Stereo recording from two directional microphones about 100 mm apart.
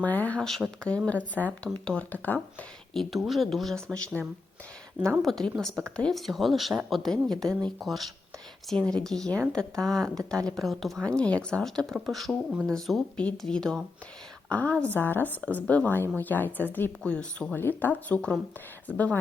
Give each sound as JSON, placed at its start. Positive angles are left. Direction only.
{"t": 0.0, "sound": "a woman's voice", "side_deg": 15}
{"t": 2.9, "sound": "a woman's voice", "side_deg": 0}